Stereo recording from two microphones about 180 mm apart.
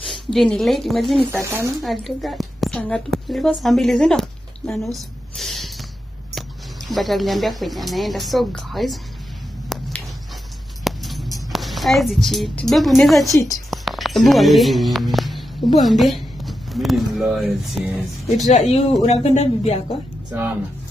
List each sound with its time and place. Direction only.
0.0 s a woman's voice: centre (ahead or behind)
1.3 s speech: 15° right (ahead or behind)
1.8 s a woman's voice: centre (ahead or behind)
4.9 s a sound: centre (ahead or behind)
6.9 s speech: centre (ahead or behind)
9.7 s a sound: centre (ahead or behind)
11.5 s a woman's voice: centre (ahead or behind)
13.3 s a woman's voice: 15° left (ahead or behind)
13.7 s speech: centre (ahead or behind)
18.5 s speech: 40° left (ahead or behind)